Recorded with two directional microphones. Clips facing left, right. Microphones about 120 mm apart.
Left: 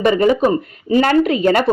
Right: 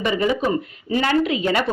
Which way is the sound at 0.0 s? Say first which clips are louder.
Left 7 dB; 45° left (ahead or behind).